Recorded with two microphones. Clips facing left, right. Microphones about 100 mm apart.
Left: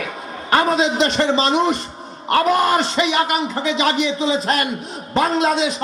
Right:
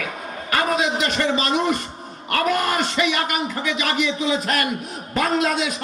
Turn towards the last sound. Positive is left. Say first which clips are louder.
# left 3 dB
turn(degrees=30)  # may be behind; listen again after turning